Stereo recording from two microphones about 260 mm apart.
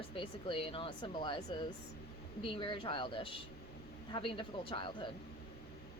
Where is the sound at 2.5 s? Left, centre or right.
Centre.